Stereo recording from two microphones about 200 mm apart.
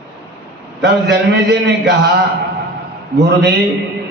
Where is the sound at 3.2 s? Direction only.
55° right (ahead or behind).